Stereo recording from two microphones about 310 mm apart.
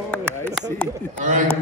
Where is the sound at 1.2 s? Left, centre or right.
Right.